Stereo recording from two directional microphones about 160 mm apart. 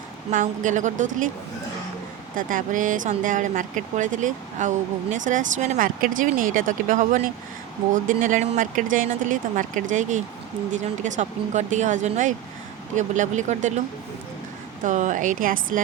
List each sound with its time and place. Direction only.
0.3 s speech: 50° right (ahead or behind)
2.3 s speech: 60° right (ahead or behind)
14.8 s speech: 50° right (ahead or behind)